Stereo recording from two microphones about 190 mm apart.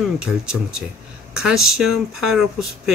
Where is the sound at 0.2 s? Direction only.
5° right (ahead or behind).